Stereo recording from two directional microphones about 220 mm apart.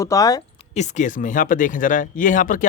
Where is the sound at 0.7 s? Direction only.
30° left (ahead or behind).